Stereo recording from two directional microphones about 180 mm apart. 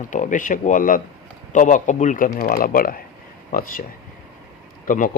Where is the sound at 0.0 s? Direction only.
45° left (ahead or behind).